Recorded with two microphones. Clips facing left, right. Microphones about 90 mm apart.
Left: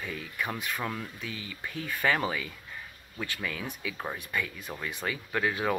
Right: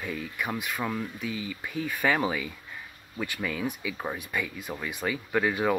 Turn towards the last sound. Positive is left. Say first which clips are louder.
# right 3 dB
turn(degrees=-10)  # may be behind; listen again after turning